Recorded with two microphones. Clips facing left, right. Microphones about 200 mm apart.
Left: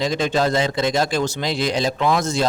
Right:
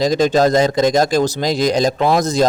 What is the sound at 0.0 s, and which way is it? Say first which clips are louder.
A man's voice: right 6 dB; 40° right (ahead or behind).